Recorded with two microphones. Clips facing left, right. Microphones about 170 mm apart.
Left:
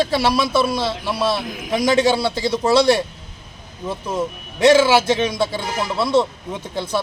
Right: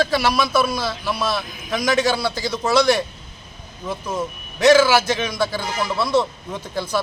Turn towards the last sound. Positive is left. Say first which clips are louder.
# left 1 dB
turn(degrees=25)  # may be behind; listen again after turning